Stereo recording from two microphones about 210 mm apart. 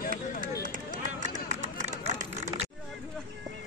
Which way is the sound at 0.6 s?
40° right (ahead or behind).